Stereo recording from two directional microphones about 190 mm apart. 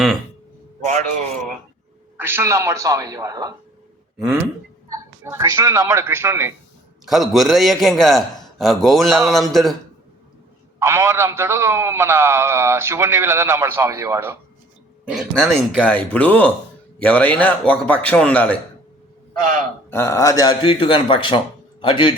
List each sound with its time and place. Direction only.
0.9 s a man's voice: 40° right (ahead or behind)
2.1 s a man's voice: 10° right (ahead or behind)
4.2 s a man's voice: 5° right (ahead or behind)
5.2 s a man's voice: 15° right (ahead or behind)
7.0 s a man's voice: centre (ahead or behind)
10.8 s a man's voice: 15° right (ahead or behind)
15.1 s a man's voice: centre (ahead or behind)
19.9 s a man's voice: 15° left (ahead or behind)